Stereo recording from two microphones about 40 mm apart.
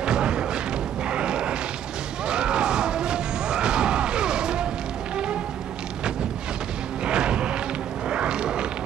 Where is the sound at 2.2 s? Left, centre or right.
Right.